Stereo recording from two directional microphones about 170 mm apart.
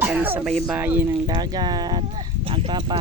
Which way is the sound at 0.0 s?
10° right (ahead or behind).